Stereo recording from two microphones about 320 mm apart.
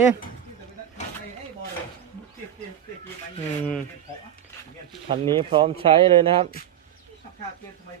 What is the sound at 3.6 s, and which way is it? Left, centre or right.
Speech, centre.